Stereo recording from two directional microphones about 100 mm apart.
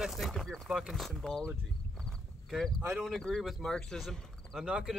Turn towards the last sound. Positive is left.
turn(degrees=-10)  # may be behind; listen again after turning